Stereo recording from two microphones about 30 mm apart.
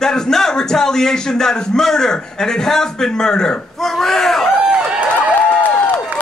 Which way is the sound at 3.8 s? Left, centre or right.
Centre.